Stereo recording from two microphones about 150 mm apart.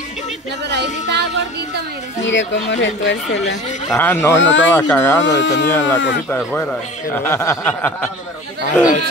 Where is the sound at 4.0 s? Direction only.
15° left (ahead or behind).